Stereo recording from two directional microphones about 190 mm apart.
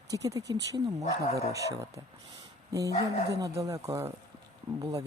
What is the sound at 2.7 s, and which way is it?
Speech, 15° right (ahead or behind).